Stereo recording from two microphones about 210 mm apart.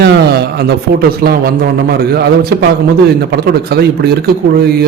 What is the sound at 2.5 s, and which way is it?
A man's voice, 50° right (ahead or behind).